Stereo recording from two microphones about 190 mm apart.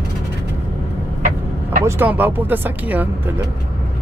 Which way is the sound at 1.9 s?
10° right (ahead or behind).